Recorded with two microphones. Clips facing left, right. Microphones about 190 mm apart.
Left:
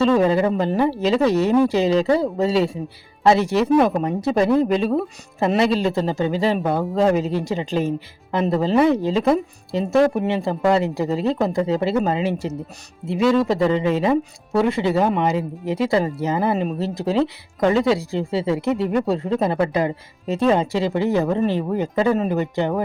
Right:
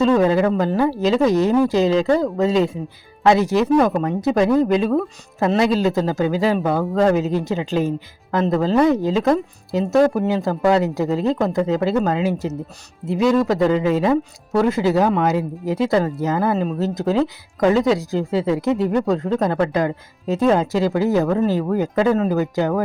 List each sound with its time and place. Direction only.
0.2 s speech: centre (ahead or behind)